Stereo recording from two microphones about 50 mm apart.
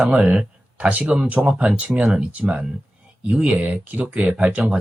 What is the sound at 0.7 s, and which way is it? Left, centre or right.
Speech, right.